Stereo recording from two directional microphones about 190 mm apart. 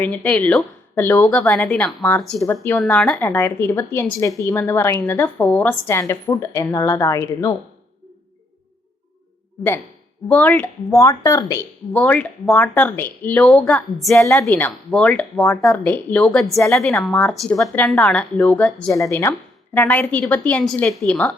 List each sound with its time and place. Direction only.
0.0 s a woman's voice: 10° left (ahead or behind)
10.2 s a woman's voice: 5° left (ahead or behind)